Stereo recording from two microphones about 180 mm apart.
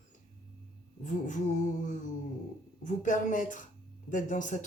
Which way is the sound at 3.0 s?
45° left (ahead or behind).